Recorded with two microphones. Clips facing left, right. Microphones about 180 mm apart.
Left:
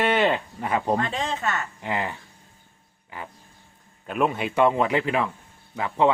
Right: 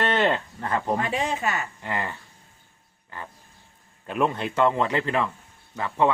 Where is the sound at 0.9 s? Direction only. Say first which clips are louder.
Even; 10° right (ahead or behind).